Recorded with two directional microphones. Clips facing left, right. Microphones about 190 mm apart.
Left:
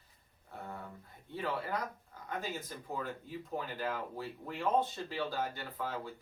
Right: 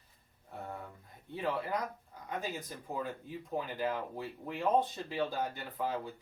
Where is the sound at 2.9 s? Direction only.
15° right (ahead or behind).